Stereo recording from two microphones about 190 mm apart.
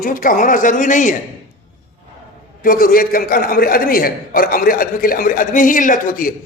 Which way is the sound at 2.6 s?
50° left (ahead or behind).